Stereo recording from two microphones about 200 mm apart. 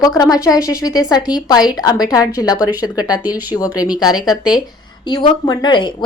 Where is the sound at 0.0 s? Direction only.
20° left (ahead or behind).